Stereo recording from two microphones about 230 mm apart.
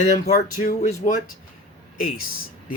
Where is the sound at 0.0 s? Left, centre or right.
Left.